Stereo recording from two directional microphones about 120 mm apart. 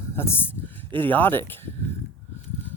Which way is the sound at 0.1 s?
20° left (ahead or behind).